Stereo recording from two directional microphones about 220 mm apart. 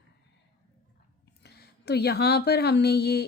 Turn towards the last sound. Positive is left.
turn(degrees=45)  # may be behind; listen again after turning